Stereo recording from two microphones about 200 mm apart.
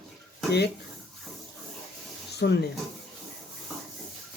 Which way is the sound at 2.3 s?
55° left (ahead or behind).